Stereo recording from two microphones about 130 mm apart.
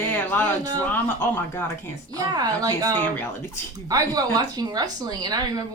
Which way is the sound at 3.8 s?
30° right (ahead or behind).